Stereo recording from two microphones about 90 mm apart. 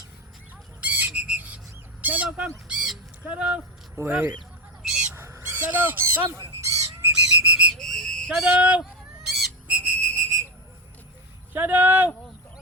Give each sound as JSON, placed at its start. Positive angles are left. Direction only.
{"t": 0.8, "sound": "squawk", "side_deg": -15}
{"t": 1.4, "sound": "bird", "side_deg": -20}
{"t": 2.6, "sound": "bird", "side_deg": -5}
{"t": 3.2, "sound": "speech", "side_deg": -10}
{"t": 3.9, "sound": "speech", "side_deg": -25}
{"t": 4.8, "sound": "bird", "side_deg": -10}
{"t": 5.1, "sound": "bird", "side_deg": -30}
{"t": 5.4, "sound": "speech", "side_deg": -20}
{"t": 6.2, "sound": "bird", "side_deg": -35}
{"t": 7.8, "sound": "a sound", "side_deg": 5}
{"t": 8.3, "sound": "speech", "side_deg": -10}
{"t": 8.8, "sound": "honk", "side_deg": 0}
{"t": 9.6, "sound": "whistle", "side_deg": -15}
{"t": 11.5, "sound": "speech", "side_deg": -20}